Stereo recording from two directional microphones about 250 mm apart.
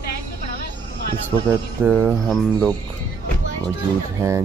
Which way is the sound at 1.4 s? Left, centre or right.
Centre.